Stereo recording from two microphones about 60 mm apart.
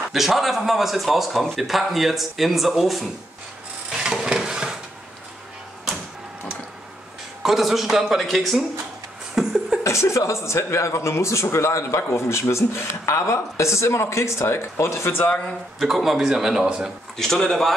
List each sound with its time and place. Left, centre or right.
0.1 s speech: centre
3.9 s a sound: centre
7.4 s speech: centre
9.3 s a sound: centre
9.8 s speech: left
15.8 s speech: centre
17.2 s speech: centre